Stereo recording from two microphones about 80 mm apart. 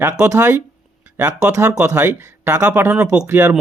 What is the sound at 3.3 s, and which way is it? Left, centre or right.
Speech, right.